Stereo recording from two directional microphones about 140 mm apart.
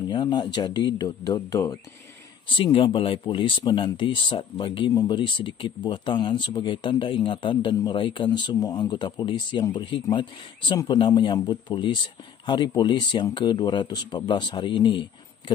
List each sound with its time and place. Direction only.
0.1 s speech: 35° left (ahead or behind)
2.5 s speech: 35° left (ahead or behind)